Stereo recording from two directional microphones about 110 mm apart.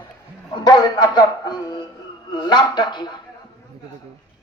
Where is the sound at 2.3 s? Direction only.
40° left (ahead or behind).